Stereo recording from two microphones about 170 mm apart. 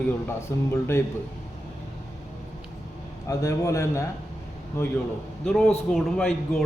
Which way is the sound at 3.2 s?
20° left (ahead or behind).